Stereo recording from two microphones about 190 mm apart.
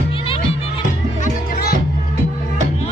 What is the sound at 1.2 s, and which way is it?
Music, 50° left (ahead or behind).